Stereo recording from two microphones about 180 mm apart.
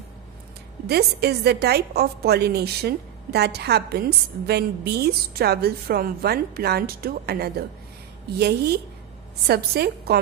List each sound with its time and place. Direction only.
0.9 s a woman's voice: 65° right (ahead or behind)